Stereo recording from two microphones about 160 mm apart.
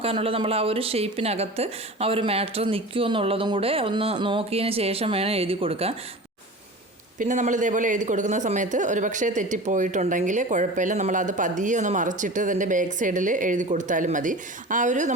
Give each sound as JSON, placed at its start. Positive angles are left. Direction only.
{"t": 0.0, "sound": "a woman's voice", "side_deg": -35}
{"t": 7.2, "sound": "a man's voice", "side_deg": -50}